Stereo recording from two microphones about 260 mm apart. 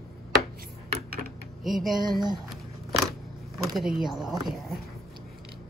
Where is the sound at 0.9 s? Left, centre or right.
Right.